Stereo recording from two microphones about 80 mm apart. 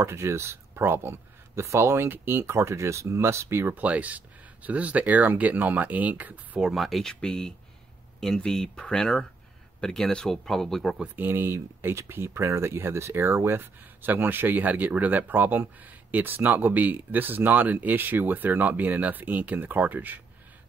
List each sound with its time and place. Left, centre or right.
0.0 s speech: right
6.6 s speech: centre
11.1 s speech: right